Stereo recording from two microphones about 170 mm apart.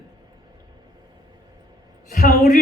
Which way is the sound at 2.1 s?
55° left (ahead or behind).